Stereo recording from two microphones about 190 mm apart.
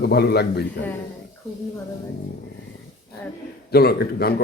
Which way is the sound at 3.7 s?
55° left (ahead or behind).